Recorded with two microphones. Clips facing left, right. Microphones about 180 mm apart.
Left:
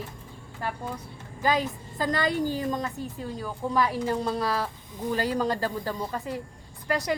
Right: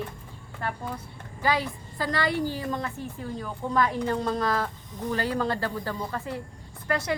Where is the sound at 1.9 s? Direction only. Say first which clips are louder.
Left 1 dB; 20° left (ahead or behind).